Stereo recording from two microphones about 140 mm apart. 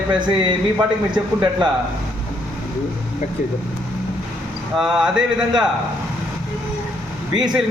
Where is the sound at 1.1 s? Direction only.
30° right (ahead or behind).